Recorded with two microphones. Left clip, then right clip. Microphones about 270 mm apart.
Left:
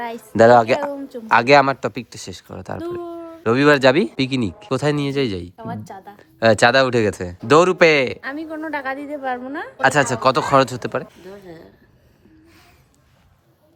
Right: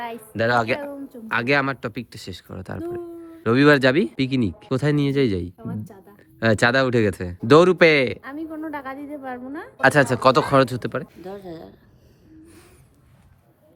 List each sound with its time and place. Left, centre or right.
0.3 s a woman's voice: centre
8.2 s a woman's voice: left
9.8 s a woman's voice: centre